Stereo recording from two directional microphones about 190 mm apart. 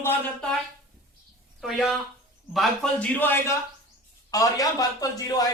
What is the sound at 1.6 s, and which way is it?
A man's voice, centre (ahead or behind).